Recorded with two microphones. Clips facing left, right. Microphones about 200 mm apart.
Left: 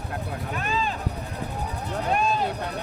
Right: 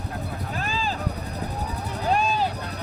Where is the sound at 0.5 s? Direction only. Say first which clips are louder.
Left 2 dB; 35° right (ahead or behind).